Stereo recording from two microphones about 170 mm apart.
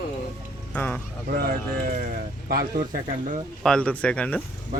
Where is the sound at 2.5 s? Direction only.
60° right (ahead or behind).